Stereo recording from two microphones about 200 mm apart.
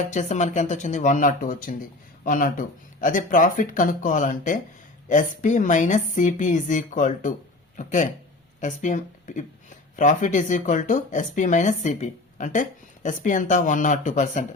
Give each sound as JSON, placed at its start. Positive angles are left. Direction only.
{"t": 0.1, "sound": "speech", "side_deg": 35}